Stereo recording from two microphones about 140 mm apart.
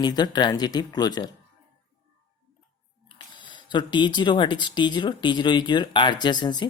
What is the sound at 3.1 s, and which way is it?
Speech, 35° left (ahead or behind).